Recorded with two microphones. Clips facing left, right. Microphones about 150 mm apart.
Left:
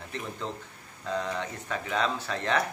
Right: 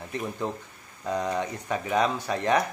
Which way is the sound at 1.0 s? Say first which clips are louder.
Right 4 dB; 15° right (ahead or behind).